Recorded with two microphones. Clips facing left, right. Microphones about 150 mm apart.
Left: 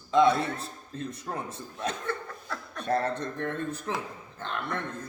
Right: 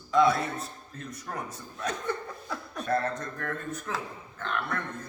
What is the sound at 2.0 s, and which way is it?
Laughter, 10° right (ahead or behind).